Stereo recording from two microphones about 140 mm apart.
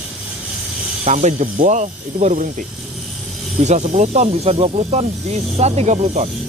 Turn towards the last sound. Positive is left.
turn(degrees=-55)  # may be behind; listen again after turning